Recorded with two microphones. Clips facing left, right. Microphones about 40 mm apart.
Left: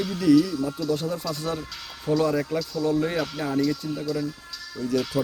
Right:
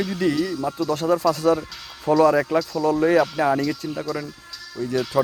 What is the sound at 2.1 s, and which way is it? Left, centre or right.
Speech, right.